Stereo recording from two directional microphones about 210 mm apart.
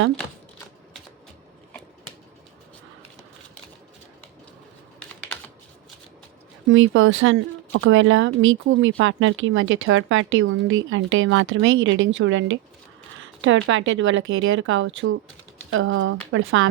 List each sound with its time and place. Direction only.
6.7 s speech: 65° right (ahead or behind)